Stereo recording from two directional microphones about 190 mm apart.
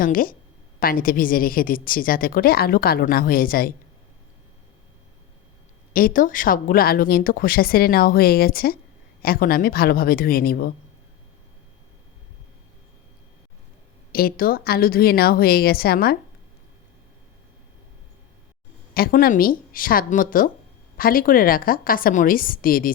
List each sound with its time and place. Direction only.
0.0 s a woman's voice: 50° left (ahead or behind)
5.9 s a woman's voice: 50° left (ahead or behind)
14.1 s a woman's voice: 50° left (ahead or behind)
18.9 s a woman's voice: 50° left (ahead or behind)